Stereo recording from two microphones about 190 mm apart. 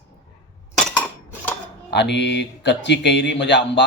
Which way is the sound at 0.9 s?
5° left (ahead or behind).